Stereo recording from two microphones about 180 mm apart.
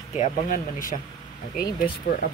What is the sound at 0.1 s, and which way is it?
Speech, 45° left (ahead or behind).